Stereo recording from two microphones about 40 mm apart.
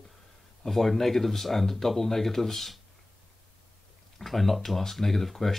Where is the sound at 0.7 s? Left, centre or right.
Centre.